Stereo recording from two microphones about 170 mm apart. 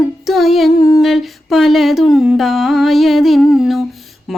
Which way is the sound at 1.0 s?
Centre (ahead or behind).